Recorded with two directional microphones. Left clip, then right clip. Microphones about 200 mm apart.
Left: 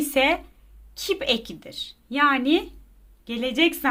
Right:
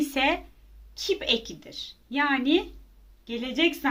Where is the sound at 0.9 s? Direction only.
40° left (ahead or behind).